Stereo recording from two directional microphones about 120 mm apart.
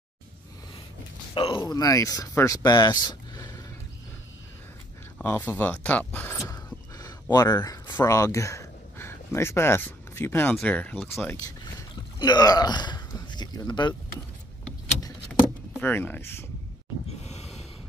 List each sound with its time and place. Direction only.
1.3 s speech: 45° left (ahead or behind)
1.7 s speech: 30° left (ahead or behind)
5.2 s speech: 15° left (ahead or behind)
6.5 s a sound: 30° left (ahead or behind)
7.5 s speech: 30° left (ahead or behind); by 11.1 s 15° left (ahead or behind)
12.2 s speech: 35° left (ahead or behind)
15.8 s speech: 15° left (ahead or behind)
17.2 s snort: 65° left (ahead or behind)